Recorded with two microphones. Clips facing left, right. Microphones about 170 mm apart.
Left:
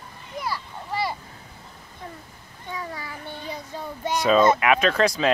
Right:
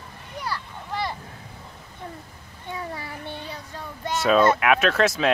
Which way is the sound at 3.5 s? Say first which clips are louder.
Left 3 dB; 10° left (ahead or behind).